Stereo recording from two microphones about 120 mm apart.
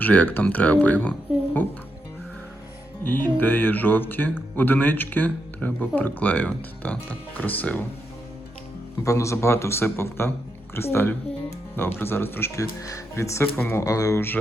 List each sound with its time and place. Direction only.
0.0 s speech: 15° left (ahead or behind)
3.0 s speech: 15° left (ahead or behind)
9.0 s speech: 25° left (ahead or behind)